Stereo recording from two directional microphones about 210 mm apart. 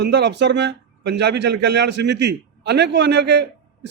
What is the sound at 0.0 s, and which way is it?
A man's voice, 55° right (ahead or behind).